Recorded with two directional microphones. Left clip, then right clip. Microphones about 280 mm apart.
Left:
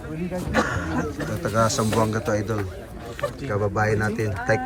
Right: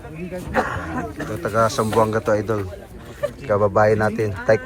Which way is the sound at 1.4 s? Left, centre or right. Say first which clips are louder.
Right 3 dB; centre.